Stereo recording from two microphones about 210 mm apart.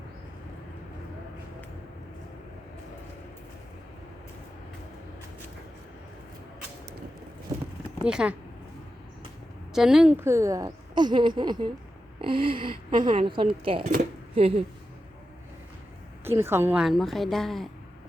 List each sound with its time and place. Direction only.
7.5 s a sound: 20° right (ahead or behind)
8.0 s a woman's voice: 5° right (ahead or behind)
9.7 s a woman's voice: centre (ahead or behind); by 14.6 s 25° right (ahead or behind)
16.2 s a woman's voice: 10° right (ahead or behind)